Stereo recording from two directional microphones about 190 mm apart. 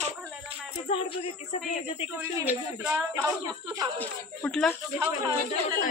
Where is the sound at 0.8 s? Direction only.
30° left (ahead or behind).